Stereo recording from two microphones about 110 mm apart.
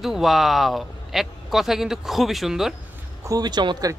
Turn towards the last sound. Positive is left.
turn(degrees=-40)  # may be behind; listen again after turning